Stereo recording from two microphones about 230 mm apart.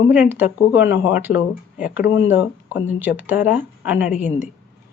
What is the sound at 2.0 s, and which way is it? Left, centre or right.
Speech, left.